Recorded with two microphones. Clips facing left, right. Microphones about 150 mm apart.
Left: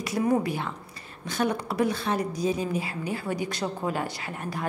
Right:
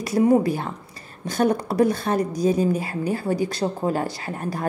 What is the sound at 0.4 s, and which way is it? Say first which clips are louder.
A woman's voice: right 5 dB; 40° right (ahead or behind).